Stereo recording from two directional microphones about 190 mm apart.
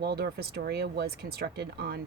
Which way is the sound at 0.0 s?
60° right (ahead or behind).